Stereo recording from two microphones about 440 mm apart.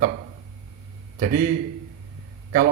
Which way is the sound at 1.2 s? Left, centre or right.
Centre.